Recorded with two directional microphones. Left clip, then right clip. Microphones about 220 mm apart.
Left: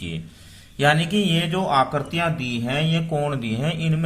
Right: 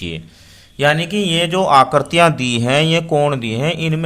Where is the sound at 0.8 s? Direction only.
20° right (ahead or behind).